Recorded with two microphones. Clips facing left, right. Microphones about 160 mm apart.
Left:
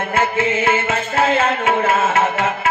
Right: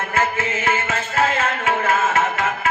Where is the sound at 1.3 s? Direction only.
25° left (ahead or behind).